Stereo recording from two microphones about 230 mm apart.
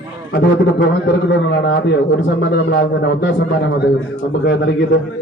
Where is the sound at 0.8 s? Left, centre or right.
Left.